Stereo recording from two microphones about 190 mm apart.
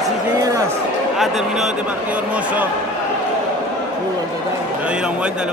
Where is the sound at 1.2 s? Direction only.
Centre (ahead or behind).